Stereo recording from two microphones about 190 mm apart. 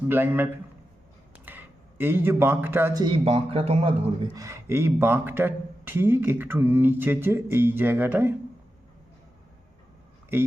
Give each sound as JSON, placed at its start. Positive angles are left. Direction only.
{"t": 0.1, "sound": "speech", "side_deg": -10}
{"t": 3.2, "sound": "speech", "side_deg": -35}
{"t": 4.4, "sound": "speech", "side_deg": -15}
{"t": 10.3, "sound": "speech", "side_deg": -10}